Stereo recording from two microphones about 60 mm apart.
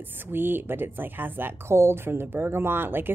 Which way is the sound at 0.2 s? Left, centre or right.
Right.